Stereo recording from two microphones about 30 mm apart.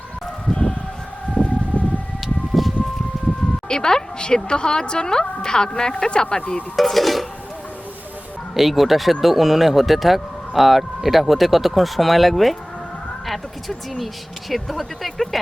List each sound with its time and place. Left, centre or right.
1.4 s siren: left
1.7 s siren: right
2.2 s siren: centre
3.7 s speech: left
6.7 s speech: centre
8.5 s speech: centre